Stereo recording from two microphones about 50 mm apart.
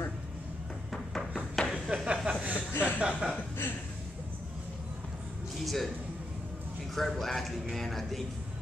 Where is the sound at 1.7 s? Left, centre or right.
Centre.